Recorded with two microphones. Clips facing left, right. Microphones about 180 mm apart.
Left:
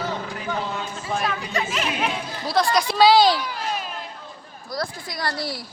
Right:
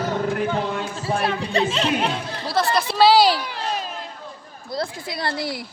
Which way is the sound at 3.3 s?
30° right (ahead or behind).